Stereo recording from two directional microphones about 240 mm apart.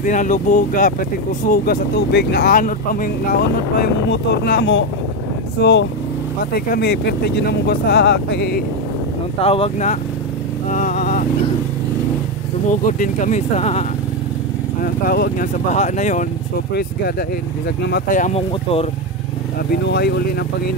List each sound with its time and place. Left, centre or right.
0.0 s speech: left
9.4 s speech: left
10.7 s vehicle: left
12.8 s speech: left
14.8 s speech: left
17.8 s speech: left
19.7 s speech: left